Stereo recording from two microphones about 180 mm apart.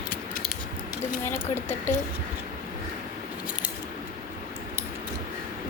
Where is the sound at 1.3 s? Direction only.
10° left (ahead or behind).